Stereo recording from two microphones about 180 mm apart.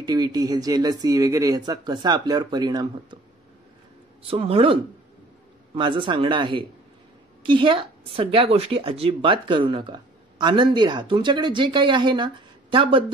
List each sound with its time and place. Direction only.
0.0 s speech: 25° right (ahead or behind)
4.2 s speech: 30° right (ahead or behind)
5.8 s speech: 25° right (ahead or behind)